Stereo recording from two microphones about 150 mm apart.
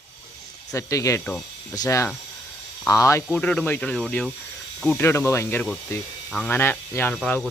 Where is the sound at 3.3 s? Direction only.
5° left (ahead or behind).